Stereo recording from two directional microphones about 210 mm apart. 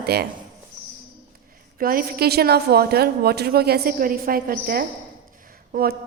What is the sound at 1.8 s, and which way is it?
A woman's voice, 45° right (ahead or behind).